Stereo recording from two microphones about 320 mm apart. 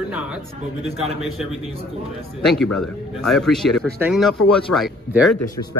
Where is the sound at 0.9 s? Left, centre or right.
Centre.